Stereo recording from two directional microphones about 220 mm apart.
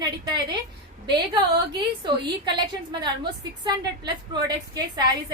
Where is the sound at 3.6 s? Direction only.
20° right (ahead or behind).